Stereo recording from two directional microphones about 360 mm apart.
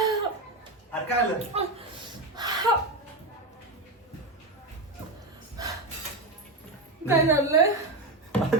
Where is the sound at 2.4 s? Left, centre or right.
Centre.